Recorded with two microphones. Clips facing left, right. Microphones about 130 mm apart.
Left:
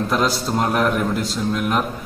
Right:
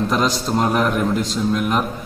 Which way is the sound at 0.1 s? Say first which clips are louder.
Right 1 dB; 5° left (ahead or behind).